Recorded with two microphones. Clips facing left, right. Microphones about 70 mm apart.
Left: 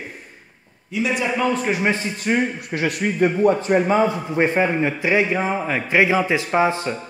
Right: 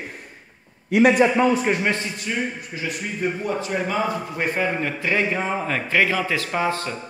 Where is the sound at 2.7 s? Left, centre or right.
Left.